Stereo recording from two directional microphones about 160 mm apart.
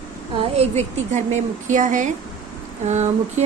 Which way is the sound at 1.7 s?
50° right (ahead or behind).